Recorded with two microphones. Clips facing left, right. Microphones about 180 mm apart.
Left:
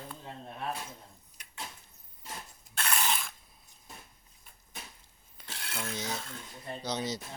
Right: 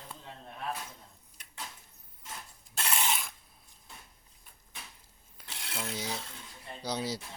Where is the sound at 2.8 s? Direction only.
20° right (ahead or behind).